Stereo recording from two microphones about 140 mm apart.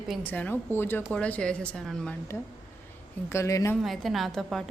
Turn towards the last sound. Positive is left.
turn(degrees=5)  # may be behind; listen again after turning